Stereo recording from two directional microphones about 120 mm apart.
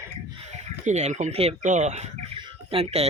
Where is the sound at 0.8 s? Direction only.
75° right (ahead or behind).